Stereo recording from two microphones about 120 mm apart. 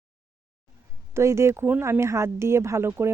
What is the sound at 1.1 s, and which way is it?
Speech, 25° right (ahead or behind).